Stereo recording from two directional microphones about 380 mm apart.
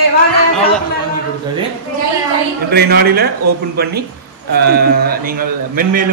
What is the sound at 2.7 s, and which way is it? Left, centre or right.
Speech, right.